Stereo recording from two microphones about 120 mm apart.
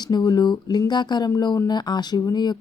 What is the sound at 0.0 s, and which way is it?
Speech, 35° left (ahead or behind).